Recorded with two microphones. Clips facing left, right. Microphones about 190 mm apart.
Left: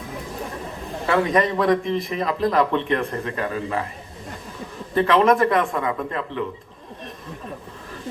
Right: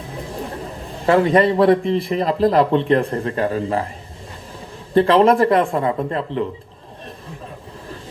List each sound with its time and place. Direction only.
1.0 s a man's voice: 35° right (ahead or behind)
4.9 s a man's voice: 30° right (ahead or behind)